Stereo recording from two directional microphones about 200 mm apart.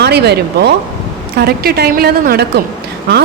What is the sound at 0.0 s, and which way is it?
A woman's voice, 55° right (ahead or behind).